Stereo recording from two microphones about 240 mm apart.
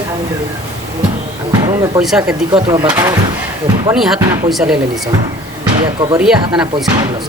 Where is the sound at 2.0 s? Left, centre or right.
Centre.